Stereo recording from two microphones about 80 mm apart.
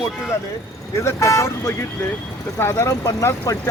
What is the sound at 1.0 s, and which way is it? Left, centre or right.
Speech, left.